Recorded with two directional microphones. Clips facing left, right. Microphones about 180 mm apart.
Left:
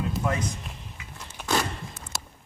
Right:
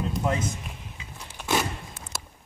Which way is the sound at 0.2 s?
25° right (ahead or behind).